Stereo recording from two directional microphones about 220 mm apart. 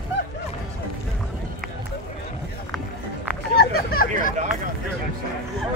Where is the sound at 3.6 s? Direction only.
45° left (ahead or behind).